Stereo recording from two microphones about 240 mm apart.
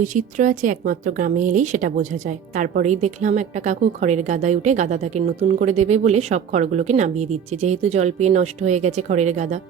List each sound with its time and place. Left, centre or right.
0.0 s speech: right